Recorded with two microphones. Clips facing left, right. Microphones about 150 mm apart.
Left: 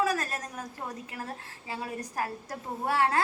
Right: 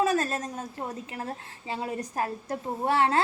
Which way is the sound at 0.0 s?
25° right (ahead or behind).